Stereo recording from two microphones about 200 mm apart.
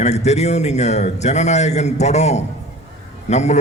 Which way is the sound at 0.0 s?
35° left (ahead or behind).